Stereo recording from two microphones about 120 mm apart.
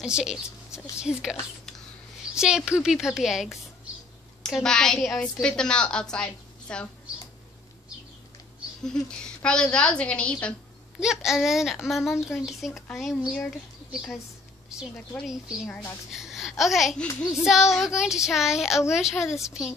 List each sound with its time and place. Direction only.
0.0 s a woman's voice: 5° right (ahead or behind)
2.3 s a woman's voice: 5° right (ahead or behind)
8.8 s a woman's voice: 5° left (ahead or behind)
11.0 s a woman's voice: 5° right (ahead or behind)
15.2 s a woman's voice: 5° right (ahead or behind)
19.2 s a woman's voice: 25° left (ahead or behind)